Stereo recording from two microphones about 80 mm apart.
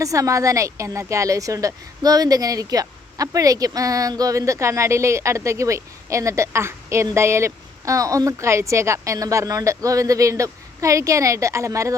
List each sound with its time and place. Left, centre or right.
0.0 s a woman's voice: right